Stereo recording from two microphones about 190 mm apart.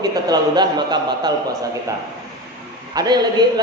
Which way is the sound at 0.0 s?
20° right (ahead or behind).